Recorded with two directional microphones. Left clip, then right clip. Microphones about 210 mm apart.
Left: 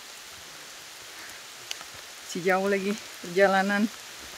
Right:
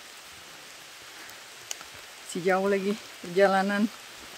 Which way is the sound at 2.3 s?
Centre (ahead or behind).